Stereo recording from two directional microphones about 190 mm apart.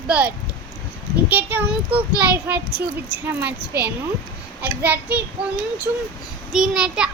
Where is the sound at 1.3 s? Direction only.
10° right (ahead or behind).